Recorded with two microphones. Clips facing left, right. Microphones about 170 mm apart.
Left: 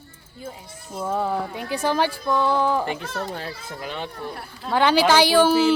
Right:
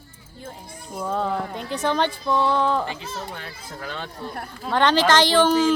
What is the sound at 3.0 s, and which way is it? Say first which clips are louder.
Speech: left 3 dB; 60° left (ahead or behind).